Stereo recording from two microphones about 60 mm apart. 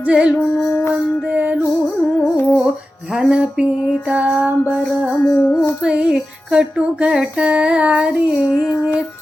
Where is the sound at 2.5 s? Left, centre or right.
Centre.